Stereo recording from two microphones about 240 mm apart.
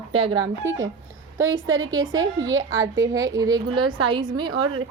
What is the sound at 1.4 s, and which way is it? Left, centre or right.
Speech, right.